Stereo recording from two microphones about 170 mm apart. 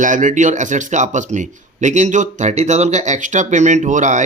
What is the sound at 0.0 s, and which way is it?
Speech, 50° right (ahead or behind).